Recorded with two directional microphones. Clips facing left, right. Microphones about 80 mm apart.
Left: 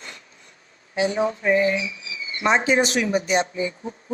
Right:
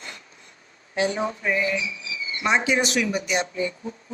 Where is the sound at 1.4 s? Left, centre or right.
Left.